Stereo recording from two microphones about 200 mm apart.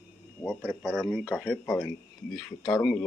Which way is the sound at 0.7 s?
Centre (ahead or behind).